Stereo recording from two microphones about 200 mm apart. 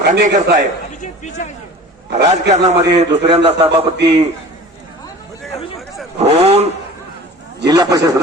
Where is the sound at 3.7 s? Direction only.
60° right (ahead or behind).